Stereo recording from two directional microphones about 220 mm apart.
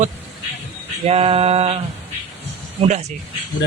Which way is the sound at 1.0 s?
25° right (ahead or behind).